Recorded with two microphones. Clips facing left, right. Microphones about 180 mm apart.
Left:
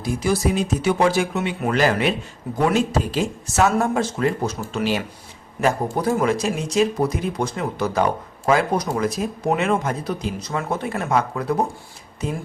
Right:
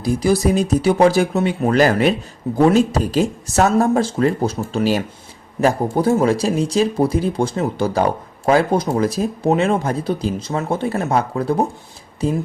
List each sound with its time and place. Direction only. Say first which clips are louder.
0.0 s speech: right 5 dB; 35° right (ahead or behind)